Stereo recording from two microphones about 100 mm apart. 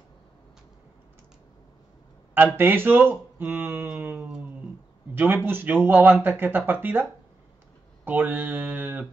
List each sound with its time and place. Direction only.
2.3 s speech: 20° right (ahead or behind)
5.1 s speech: 20° right (ahead or behind)